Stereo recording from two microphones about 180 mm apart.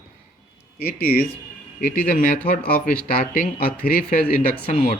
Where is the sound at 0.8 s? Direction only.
55° left (ahead or behind).